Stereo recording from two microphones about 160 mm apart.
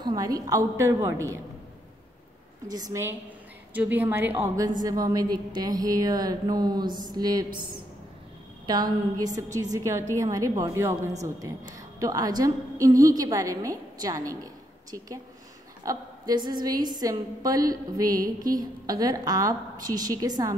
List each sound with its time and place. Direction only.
0.0 s a woman's voice: 25° right (ahead or behind)
2.7 s a woman's voice: 20° right (ahead or behind)